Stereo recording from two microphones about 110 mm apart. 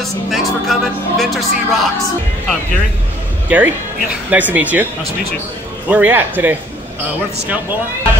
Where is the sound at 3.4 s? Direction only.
15° right (ahead or behind).